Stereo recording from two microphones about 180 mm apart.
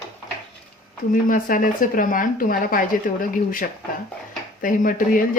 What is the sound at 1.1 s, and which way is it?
A woman's voice, 50° left (ahead or behind).